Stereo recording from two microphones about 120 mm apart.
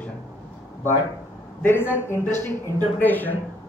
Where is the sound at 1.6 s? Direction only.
20° left (ahead or behind).